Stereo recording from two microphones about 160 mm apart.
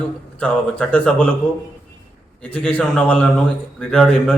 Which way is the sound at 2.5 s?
5° left (ahead or behind).